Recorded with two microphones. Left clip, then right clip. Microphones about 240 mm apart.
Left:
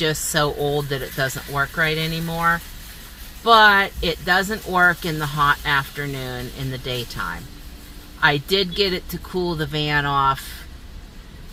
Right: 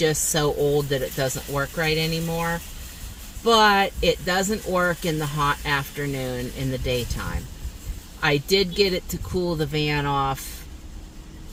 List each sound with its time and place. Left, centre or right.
0.0 s speech: centre
3.4 s speech: centre
8.2 s speech: centre